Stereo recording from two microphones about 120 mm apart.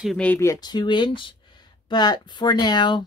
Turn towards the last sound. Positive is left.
turn(degrees=40)  # may be behind; listen again after turning